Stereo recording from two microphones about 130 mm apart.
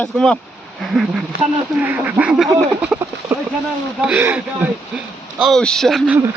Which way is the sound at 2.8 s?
10° right (ahead or behind).